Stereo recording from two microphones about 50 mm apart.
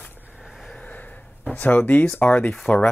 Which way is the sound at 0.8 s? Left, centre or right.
Left.